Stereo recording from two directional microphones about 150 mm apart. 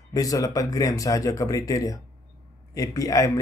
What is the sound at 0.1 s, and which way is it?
Speech, 25° left (ahead or behind).